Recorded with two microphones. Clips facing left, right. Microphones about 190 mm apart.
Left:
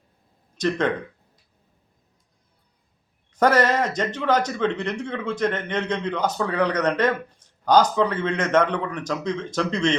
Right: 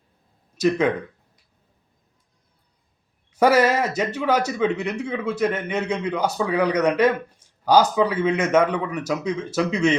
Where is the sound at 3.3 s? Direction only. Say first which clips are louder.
Right 2 dB; 10° right (ahead or behind).